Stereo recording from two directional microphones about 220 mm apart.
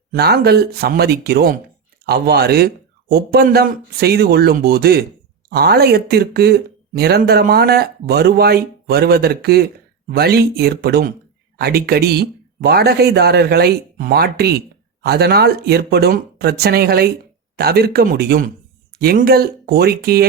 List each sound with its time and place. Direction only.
0.1 s speech: 45° right (ahead or behind)